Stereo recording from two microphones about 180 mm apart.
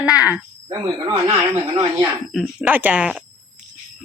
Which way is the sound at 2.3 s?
Centre (ahead or behind).